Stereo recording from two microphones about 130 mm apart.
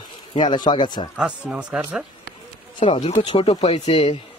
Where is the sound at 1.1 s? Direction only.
10° right (ahead or behind).